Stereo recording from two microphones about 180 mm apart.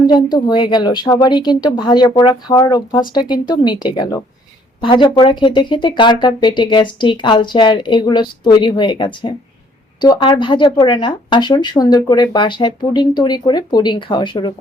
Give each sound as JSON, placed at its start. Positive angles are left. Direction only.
{"t": 0.1, "sound": "speech", "side_deg": 25}